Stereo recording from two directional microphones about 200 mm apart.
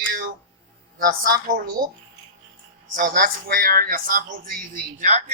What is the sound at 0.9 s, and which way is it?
A man's voice, 45° right (ahead or behind).